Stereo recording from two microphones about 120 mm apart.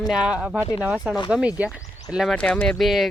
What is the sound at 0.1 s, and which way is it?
Speech, 10° right (ahead or behind).